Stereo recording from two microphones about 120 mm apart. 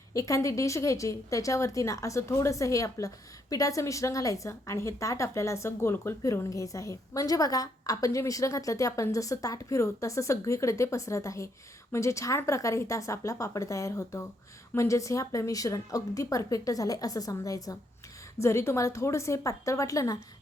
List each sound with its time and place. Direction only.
0.1 s a woman's voice: 25° left (ahead or behind)